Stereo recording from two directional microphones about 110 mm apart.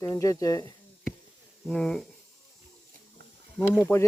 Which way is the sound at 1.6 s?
5° left (ahead or behind).